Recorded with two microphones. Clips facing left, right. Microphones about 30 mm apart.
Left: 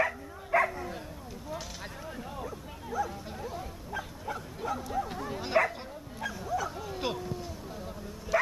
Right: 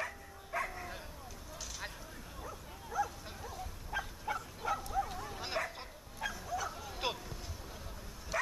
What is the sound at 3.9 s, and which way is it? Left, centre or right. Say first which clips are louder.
Bow-wow: left 1 dB; centre.